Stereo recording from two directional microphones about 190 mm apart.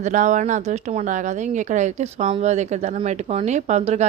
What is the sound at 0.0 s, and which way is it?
Speech, 40° right (ahead or behind).